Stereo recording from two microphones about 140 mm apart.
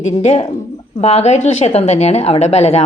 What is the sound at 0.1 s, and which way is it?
A woman's voice, 50° left (ahead or behind).